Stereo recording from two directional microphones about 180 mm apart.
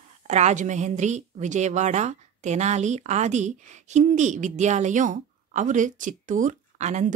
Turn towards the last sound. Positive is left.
turn(degrees=-40)  # may be behind; listen again after turning